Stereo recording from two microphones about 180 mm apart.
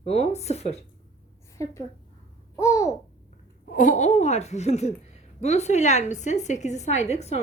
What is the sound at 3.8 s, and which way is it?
Speech, 45° left (ahead or behind).